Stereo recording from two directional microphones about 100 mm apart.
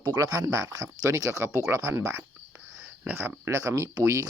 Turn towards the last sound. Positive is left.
turn(degrees=-35)  # may be behind; listen again after turning